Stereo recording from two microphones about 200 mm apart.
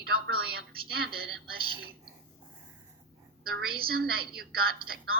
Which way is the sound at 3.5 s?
50° right (ahead or behind).